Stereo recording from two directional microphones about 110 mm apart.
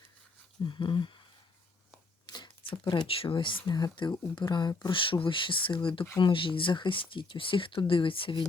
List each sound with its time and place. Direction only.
0.6 s speech: 45° left (ahead or behind)
2.2 s shuffling cards: 40° left (ahead or behind)
3.7 s speech: 40° left (ahead or behind)